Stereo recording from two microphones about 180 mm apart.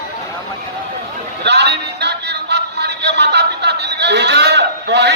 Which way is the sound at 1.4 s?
70° right (ahead or behind).